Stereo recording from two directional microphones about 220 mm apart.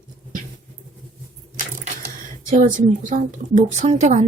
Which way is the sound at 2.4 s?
35° right (ahead or behind).